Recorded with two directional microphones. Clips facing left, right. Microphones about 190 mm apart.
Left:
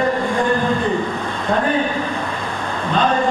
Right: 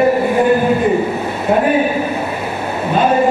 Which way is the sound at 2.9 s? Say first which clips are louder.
Right 5 dB; 10° right (ahead or behind).